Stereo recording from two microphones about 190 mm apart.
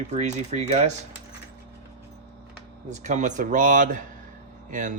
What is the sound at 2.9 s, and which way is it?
Speech, 40° right (ahead or behind).